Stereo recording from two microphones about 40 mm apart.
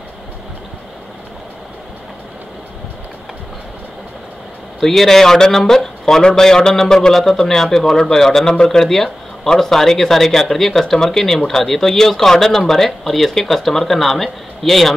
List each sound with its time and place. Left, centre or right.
4.7 s speech: centre